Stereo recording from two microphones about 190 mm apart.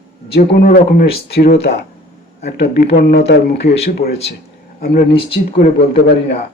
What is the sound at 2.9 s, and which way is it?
Speech, 55° left (ahead or behind).